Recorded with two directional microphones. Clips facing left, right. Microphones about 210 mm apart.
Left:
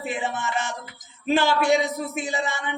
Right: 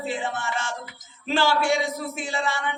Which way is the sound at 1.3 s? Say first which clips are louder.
Left 2 dB; 20° left (ahead or behind).